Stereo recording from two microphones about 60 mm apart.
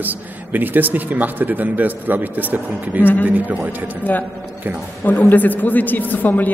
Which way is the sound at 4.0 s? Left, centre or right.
Left.